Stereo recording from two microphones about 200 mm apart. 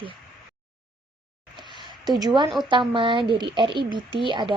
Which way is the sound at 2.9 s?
25° right (ahead or behind).